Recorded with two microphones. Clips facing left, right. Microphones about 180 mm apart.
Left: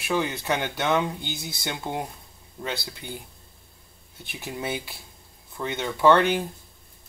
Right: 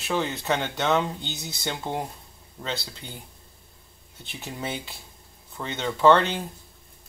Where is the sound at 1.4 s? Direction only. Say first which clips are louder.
Left 1 dB; 20° right (ahead or behind).